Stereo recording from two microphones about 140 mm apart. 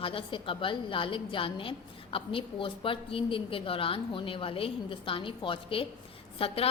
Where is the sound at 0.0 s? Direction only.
40° left (ahead or behind).